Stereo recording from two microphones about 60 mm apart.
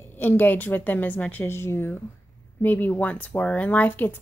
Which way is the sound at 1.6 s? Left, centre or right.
Left.